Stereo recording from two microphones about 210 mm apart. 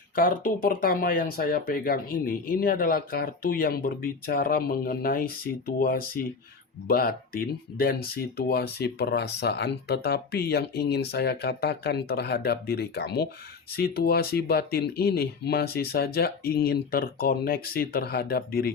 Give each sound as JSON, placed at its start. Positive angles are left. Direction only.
{"t": 0.2, "sound": "speech", "side_deg": 40}